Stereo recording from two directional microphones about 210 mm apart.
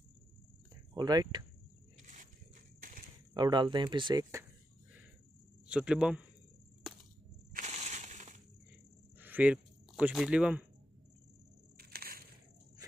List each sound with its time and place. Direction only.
0.9 s speech: 20° right (ahead or behind)
2.0 s a sound: 35° right (ahead or behind)
3.3 s speech: 20° right (ahead or behind)
5.7 s speech: 5° right (ahead or behind)
6.8 s a sound: centre (ahead or behind)
7.5 s crushing: 35° right (ahead or behind)
9.2 s speech: 10° right (ahead or behind)
11.7 s crushing: 45° right (ahead or behind)